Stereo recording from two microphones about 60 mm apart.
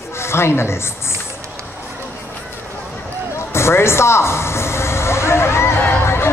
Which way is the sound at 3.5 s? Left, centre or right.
Left.